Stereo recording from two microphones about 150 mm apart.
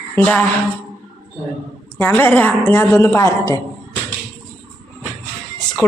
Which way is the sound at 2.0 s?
15° left (ahead or behind).